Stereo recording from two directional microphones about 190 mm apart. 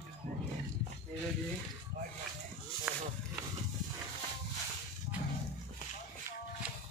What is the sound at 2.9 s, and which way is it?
Speech, 5° right (ahead or behind).